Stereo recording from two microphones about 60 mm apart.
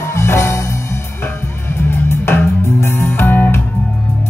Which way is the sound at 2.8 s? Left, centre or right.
Left.